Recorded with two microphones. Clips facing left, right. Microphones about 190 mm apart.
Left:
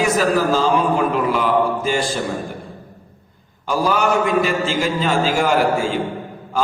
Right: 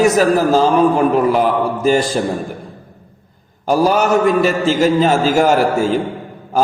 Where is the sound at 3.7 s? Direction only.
40° right (ahead or behind).